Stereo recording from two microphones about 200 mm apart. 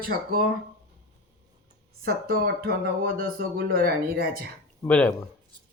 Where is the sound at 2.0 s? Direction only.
50° right (ahead or behind).